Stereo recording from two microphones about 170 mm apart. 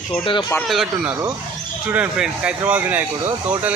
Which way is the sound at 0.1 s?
30° left (ahead or behind).